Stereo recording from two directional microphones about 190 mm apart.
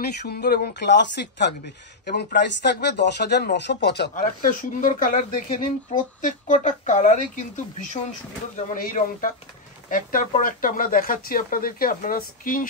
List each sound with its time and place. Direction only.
0.0 s speech: 55° left (ahead or behind)
4.1 s speech: 45° left (ahead or behind)